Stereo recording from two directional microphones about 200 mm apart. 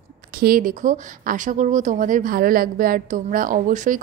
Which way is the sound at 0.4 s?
45° right (ahead or behind).